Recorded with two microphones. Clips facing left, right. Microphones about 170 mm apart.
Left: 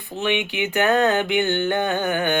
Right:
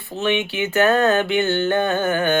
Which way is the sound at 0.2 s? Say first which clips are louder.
Right 2 dB; 15° left (ahead or behind).